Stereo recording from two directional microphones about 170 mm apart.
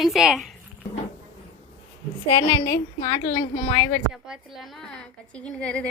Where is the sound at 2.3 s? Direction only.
20° left (ahead or behind).